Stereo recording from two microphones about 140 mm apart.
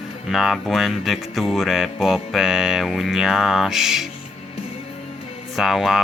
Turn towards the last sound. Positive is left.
turn(degrees=0)  # may be behind; listen again after turning